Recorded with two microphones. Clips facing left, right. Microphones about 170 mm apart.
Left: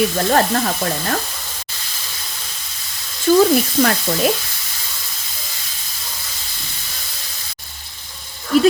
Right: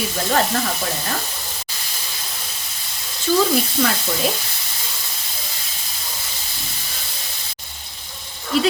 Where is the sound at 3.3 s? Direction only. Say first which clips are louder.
Left 6 dB; 50° left (ahead or behind).